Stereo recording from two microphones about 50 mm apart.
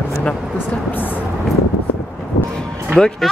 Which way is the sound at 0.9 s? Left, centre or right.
Left.